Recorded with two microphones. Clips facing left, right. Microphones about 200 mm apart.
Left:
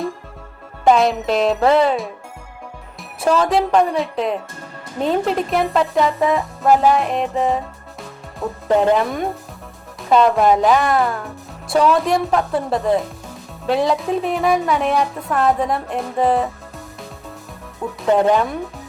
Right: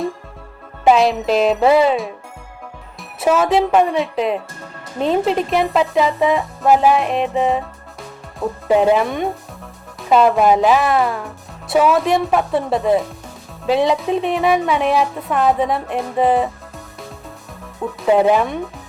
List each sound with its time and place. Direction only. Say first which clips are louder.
0.9 s speech: right 1 dB; centre (ahead or behind)
18.0 s speech: right 1 dB; 5° right (ahead or behind)